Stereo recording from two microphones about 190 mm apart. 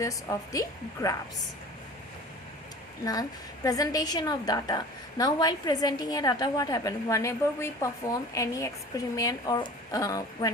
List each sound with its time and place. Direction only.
0.0 s a woman's voice: 15° left (ahead or behind)
3.0 s a woman's voice: 20° left (ahead or behind)